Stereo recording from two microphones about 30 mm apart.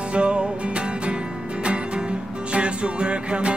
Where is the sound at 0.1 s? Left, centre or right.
Right.